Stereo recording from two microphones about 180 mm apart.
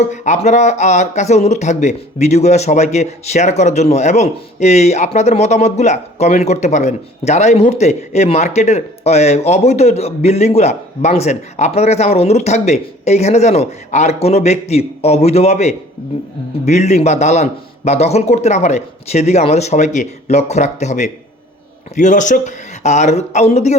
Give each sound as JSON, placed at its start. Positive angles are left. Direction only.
{"t": 0.1, "sound": "speech", "side_deg": 40}